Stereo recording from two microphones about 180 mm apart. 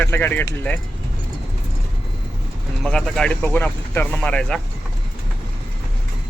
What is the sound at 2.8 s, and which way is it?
Speech, 5° left (ahead or behind).